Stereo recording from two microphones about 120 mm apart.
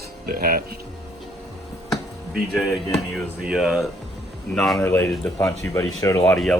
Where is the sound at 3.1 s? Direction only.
Centre (ahead or behind).